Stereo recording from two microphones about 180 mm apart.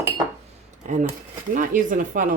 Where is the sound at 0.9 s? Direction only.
45° right (ahead or behind).